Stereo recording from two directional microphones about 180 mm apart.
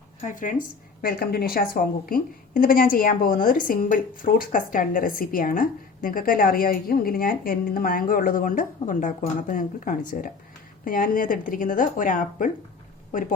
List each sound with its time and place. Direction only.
0.2 s a woman's voice: 45° left (ahead or behind)
1.0 s a woman's voice: 60° left (ahead or behind)